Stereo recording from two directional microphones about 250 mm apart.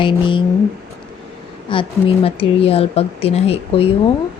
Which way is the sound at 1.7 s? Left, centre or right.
Left.